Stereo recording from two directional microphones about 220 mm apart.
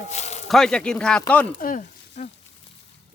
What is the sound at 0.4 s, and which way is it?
Speech, centre (ahead or behind).